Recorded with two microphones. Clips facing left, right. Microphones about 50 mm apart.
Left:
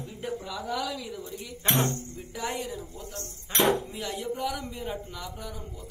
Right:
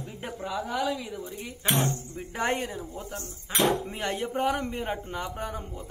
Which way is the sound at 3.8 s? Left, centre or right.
Right.